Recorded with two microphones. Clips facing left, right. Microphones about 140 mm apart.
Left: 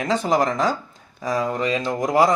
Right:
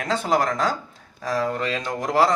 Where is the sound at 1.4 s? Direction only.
10° left (ahead or behind).